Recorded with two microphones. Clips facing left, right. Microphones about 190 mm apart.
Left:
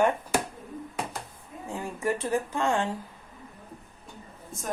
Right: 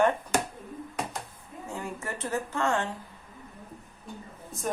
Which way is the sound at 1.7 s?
15° left (ahead or behind).